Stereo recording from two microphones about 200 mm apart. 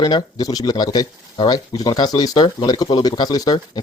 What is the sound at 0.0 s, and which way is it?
Speech, 20° left (ahead or behind).